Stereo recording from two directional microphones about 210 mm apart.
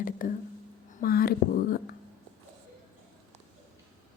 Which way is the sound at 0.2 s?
40° left (ahead or behind).